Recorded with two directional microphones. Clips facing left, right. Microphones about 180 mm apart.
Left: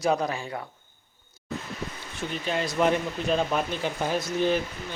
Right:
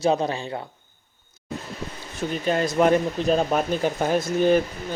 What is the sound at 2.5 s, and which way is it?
Speech, 45° right (ahead or behind).